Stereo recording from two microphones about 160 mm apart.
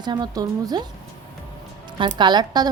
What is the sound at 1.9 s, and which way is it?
Speech, 30° right (ahead or behind).